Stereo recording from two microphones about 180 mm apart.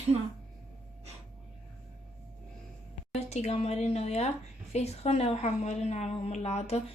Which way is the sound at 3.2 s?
35° left (ahead or behind).